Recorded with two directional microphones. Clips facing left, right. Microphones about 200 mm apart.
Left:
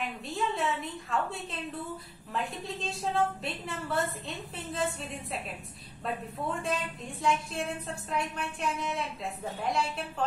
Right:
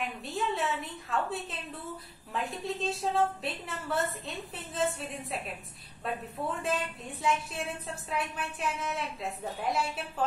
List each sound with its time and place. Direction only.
0.0 s a woman's voice: centre (ahead or behind)